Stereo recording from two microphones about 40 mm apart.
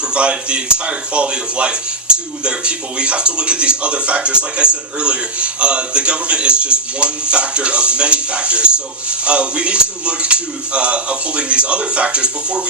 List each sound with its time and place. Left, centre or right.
0.1 s speech: right